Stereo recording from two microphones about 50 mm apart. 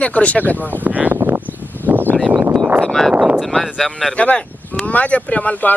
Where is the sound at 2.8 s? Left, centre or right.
Centre.